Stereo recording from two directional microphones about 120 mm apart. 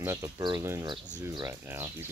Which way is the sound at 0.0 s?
25° right (ahead or behind).